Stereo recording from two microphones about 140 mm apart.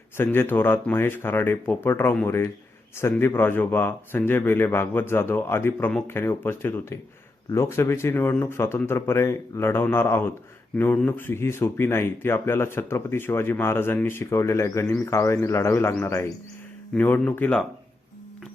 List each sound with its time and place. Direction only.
0.2 s speech: 15° left (ahead or behind)